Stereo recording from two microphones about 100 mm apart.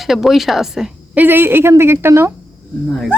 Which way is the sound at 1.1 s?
20° right (ahead or behind).